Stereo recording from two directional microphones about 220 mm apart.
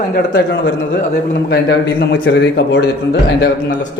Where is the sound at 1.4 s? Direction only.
45° left (ahead or behind).